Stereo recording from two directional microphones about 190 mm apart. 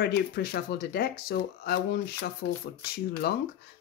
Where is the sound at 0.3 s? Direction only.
55° left (ahead or behind).